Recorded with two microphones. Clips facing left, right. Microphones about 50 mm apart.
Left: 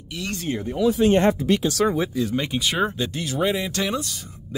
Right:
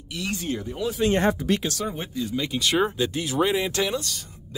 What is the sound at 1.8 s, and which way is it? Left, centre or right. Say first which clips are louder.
Speech: left 8 dB; left.